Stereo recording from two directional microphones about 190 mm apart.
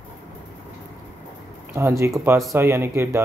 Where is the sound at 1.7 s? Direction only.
15° right (ahead or behind).